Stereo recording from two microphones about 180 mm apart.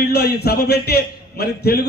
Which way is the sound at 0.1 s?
60° left (ahead or behind).